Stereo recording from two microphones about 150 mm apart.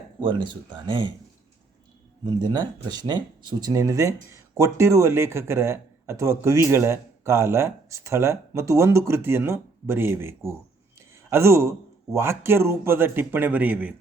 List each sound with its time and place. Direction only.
0.2 s speech: 30° right (ahead or behind)
2.2 s speech: 30° right (ahead or behind)
11.1 s a sound: 15° right (ahead or behind)
12.1 s a man's voice: 15° right (ahead or behind)